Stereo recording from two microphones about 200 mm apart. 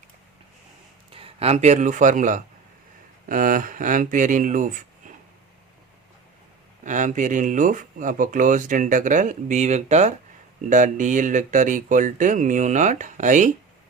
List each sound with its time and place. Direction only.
1.1 s speech: 30° right (ahead or behind)
6.8 s speech: 40° right (ahead or behind)